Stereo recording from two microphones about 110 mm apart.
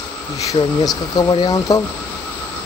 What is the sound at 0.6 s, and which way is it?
Speech, 40° left (ahead or behind).